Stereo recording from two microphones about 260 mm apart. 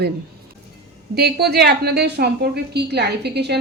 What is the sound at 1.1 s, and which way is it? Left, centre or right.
Speech, right.